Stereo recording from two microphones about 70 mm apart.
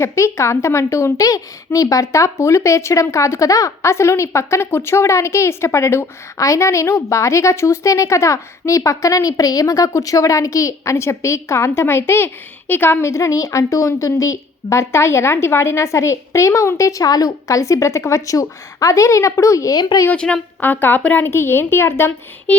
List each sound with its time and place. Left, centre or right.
0.0 s a woman's voice: left
3.9 s a woman's voice: left
13.1 s a woman's voice: left
19.7 s a woman's voice: left
20.1 s a woman's voice: centre
20.6 s speech: left
21.2 s a woman's voice: left
22.5 s a sound: centre